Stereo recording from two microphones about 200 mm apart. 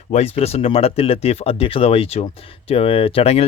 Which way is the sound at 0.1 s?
30° left (ahead or behind).